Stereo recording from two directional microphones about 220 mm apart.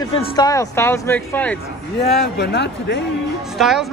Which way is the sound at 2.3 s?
50° left (ahead or behind).